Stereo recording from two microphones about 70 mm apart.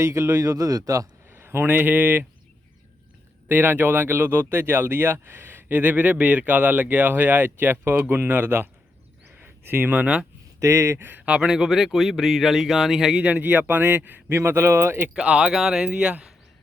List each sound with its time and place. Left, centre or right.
0.0 s speech: right
1.3 s speech: right
3.5 s speech: right
9.4 s a sound: right
9.9 s speech: centre
10.6 s speech: right
11.3 s speech: centre
13.1 s speech: right
15.1 s speech: centre
15.9 s speech: centre